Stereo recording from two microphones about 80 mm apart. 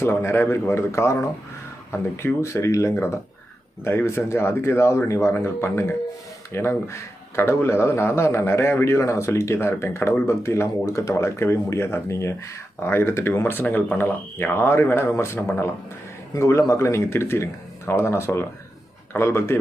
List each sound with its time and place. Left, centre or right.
0.0 s a man's voice: left